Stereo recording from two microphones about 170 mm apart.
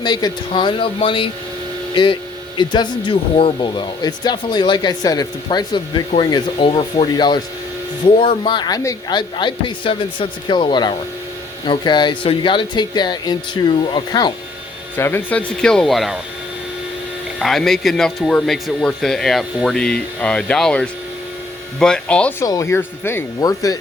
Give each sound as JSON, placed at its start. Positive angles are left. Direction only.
{"t": 0.0, "sound": "speech", "side_deg": 25}
{"t": 14.9, "sound": "speech", "side_deg": 10}
{"t": 17.4, "sound": "speech", "side_deg": 0}